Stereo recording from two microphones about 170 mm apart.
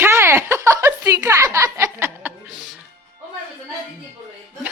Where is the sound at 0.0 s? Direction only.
15° right (ahead or behind).